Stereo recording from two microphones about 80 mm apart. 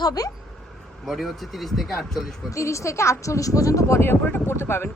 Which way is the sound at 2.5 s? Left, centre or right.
Left.